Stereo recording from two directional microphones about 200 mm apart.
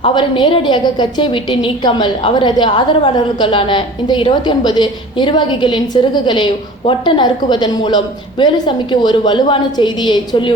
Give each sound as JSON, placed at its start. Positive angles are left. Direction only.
{"t": 0.0, "sound": "a woman's voice", "side_deg": 25}